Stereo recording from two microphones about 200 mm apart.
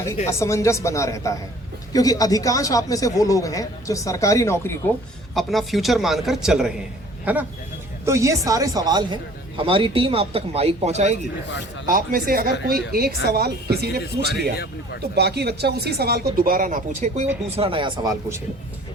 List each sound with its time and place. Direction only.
0.3 s a man's voice: 15° left (ahead or behind)
5.3 s a man's voice: centre (ahead or behind)
8.0 s speech: 15° right (ahead or behind); by 17.2 s 40° right (ahead or behind)
17.6 s speech: 25° right (ahead or behind)